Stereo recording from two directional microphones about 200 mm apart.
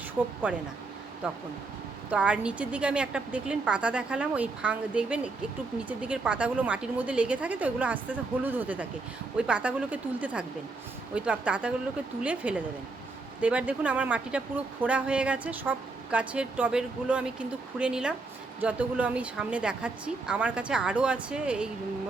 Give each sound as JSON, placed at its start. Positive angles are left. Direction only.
{"t": 0.4, "sound": "a woman's voice", "side_deg": -5}
{"t": 2.0, "sound": "a woman's voice", "side_deg": -5}